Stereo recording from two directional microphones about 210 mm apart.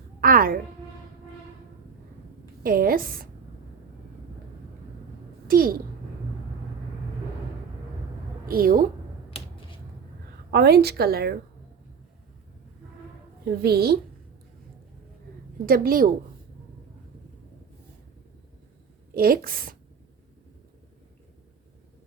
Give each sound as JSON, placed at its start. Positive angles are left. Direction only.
{"t": 0.2, "sound": "a sound", "side_deg": -45}
{"t": 2.6, "sound": "a woman's voice", "side_deg": -45}
{"t": 5.5, "sound": "a child's voice", "side_deg": -45}
{"t": 8.4, "sound": "a woman's voice", "side_deg": -45}
{"t": 10.5, "sound": "a woman's voice", "side_deg": -50}
{"t": 13.4, "sound": "a woman's voice", "side_deg": -50}
{"t": 15.6, "sound": "a woman's voice", "side_deg": -45}
{"t": 19.1, "sound": "a woman's voice", "side_deg": -45}